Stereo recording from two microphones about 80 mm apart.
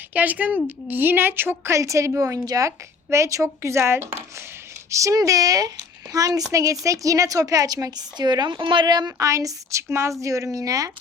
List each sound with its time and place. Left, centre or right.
0.1 s a woman's voice: right
1.8 s a woman's voice: right
9.1 s a woman's voice: right